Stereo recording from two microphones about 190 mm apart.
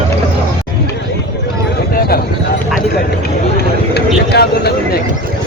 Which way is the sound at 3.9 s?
60° left (ahead or behind).